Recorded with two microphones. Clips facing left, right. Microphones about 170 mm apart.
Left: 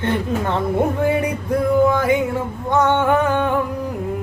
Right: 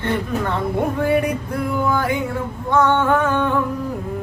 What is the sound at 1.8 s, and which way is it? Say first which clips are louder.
Music: left 4 dB; 20° left (ahead or behind).